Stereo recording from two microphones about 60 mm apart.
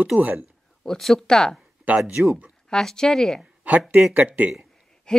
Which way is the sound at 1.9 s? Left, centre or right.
Right.